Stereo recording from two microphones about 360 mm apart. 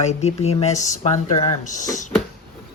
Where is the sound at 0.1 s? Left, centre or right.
Centre.